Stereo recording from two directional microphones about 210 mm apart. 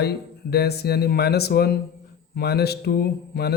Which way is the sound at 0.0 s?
50° left (ahead or behind).